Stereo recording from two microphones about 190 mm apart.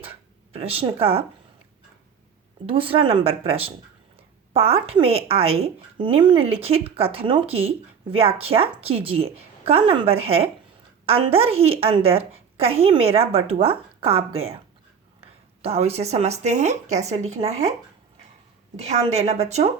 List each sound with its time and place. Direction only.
0.5 s a woman's voice: 30° right (ahead or behind)
2.6 s a woman's voice: 30° right (ahead or behind)
18.8 s a woman's voice: 35° right (ahead or behind)